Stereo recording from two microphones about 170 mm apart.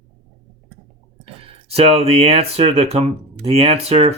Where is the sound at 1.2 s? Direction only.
35° right (ahead or behind).